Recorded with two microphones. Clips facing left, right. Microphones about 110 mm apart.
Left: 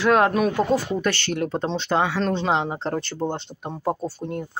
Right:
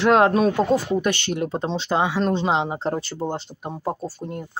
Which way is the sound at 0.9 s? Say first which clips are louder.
Right 1 dB; 15° right (ahead or behind).